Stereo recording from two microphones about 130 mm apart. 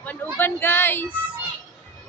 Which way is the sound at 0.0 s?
15° left (ahead or behind).